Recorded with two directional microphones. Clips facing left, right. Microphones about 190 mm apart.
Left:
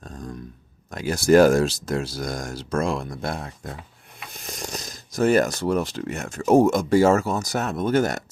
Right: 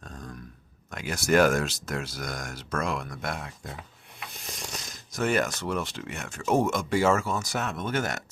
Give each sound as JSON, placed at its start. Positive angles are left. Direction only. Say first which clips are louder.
{"t": 0.9, "sound": "speech", "louder": "left 8 dB", "side_deg": 35}